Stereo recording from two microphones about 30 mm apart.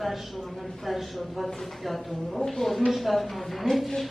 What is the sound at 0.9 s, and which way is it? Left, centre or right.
A man's voice, centre.